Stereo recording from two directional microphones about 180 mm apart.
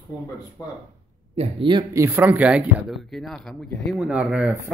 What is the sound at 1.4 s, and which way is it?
Speech, 30° right (ahead or behind).